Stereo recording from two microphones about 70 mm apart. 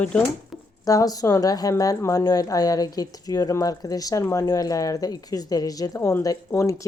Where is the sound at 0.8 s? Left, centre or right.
Left.